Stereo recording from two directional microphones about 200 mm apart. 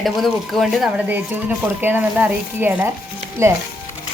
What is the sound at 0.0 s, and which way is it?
Speech, centre (ahead or behind).